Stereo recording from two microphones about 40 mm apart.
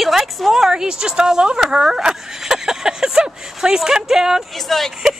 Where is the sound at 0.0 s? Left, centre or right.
Centre.